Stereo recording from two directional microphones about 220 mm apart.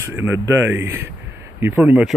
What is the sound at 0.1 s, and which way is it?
Speech, 10° right (ahead or behind).